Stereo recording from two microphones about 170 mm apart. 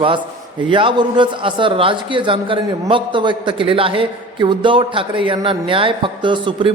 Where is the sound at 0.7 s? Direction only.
30° right (ahead or behind).